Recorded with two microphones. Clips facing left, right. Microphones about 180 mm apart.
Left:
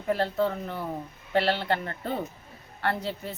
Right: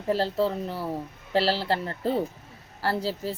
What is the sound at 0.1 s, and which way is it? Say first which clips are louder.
Speech: right 1 dB; 30° right (ahead or behind).